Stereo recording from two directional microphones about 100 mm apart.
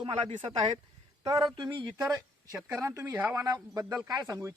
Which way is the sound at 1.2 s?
35° right (ahead or behind).